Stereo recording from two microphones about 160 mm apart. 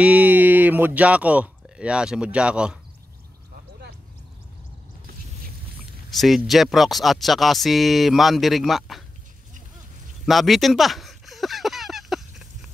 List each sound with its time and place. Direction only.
0.0 s speech: 10° right (ahead or behind)
6.0 s speech: centre (ahead or behind)
10.2 s a sound: centre (ahead or behind)